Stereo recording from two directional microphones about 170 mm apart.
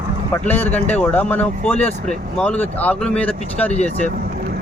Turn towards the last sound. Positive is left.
turn(degrees=40)  # may be behind; listen again after turning